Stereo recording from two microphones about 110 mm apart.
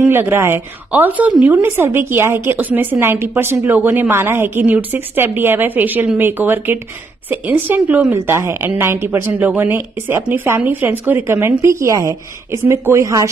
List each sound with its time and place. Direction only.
0.0 s a woman's voice: 20° right (ahead or behind)